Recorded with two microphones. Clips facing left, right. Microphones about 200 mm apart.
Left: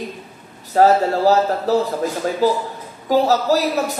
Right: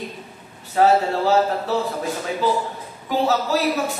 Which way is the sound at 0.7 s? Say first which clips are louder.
Left 3 dB; 40° left (ahead or behind).